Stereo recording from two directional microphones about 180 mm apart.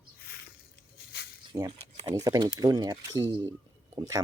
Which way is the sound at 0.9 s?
65° left (ahead or behind).